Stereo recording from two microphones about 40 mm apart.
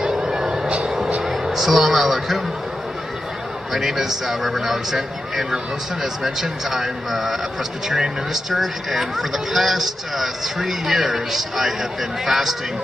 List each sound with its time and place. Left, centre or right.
0.0 s music: centre
1.2 s a man's voice: centre
3.7 s a man's voice: centre